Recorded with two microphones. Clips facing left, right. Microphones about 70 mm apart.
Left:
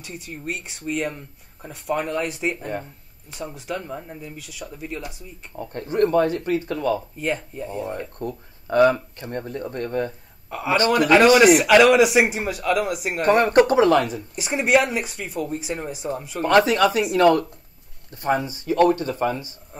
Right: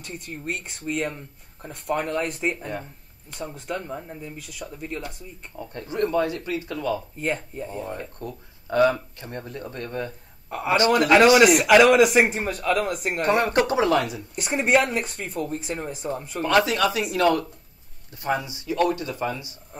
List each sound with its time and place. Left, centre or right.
0.0 s speech: centre
5.6 s speech: left
7.2 s speech: centre
8.2 s speech: left
9.1 s speech: left
10.5 s a man's voice: centre
13.2 s speech: left
14.3 s speech: centre
16.5 s speech: left